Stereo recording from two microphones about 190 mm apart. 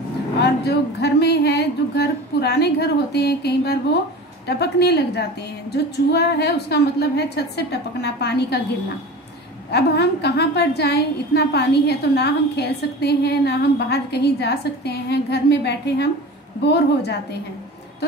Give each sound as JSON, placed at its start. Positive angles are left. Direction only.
{"t": 0.4, "sound": "a woman's voice", "side_deg": 60}
{"t": 9.7, "sound": "a woman's voice", "side_deg": 60}